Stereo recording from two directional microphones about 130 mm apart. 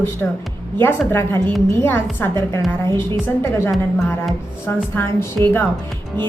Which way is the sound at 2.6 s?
20° left (ahead or behind).